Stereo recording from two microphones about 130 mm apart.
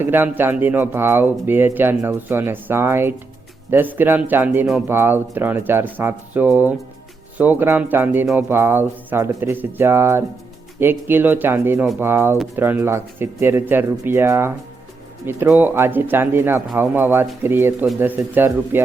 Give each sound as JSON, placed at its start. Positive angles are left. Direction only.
{"t": 0.0, "sound": "speech", "side_deg": -15}